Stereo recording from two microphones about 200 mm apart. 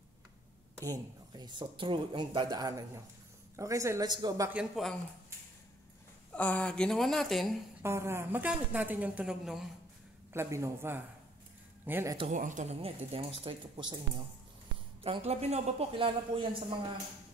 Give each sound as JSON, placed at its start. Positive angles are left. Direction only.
{"t": 0.7, "sound": "a woman's voice", "side_deg": -15}
{"t": 6.3, "sound": "speech", "side_deg": 5}
{"t": 7.8, "sound": "a woman's voice", "side_deg": -15}
{"t": 10.3, "sound": "a woman's voice", "side_deg": -15}
{"t": 12.3, "sound": "speech", "side_deg": -40}
{"t": 15.0, "sound": "speech", "side_deg": -30}